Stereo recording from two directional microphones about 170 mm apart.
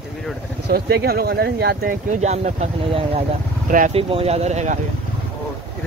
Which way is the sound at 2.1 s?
45° right (ahead or behind).